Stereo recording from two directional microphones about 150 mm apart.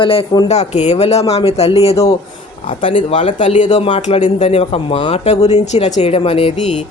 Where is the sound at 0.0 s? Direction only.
35° left (ahead or behind).